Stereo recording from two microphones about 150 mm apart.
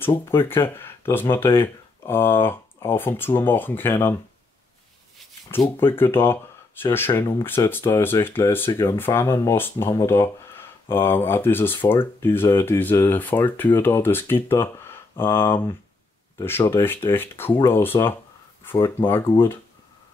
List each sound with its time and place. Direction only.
0.0 s speech: 15° left (ahead or behind)
5.7 s speech: 15° left (ahead or behind)